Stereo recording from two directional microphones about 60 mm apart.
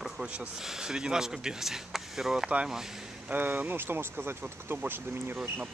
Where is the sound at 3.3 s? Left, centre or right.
Right.